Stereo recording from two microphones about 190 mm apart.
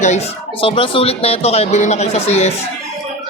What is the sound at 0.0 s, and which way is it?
Speech, 35° left (ahead or behind).